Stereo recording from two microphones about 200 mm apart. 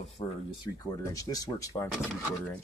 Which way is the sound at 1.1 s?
15° left (ahead or behind).